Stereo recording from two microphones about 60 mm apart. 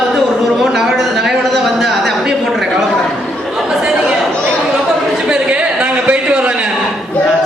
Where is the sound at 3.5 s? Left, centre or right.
Centre.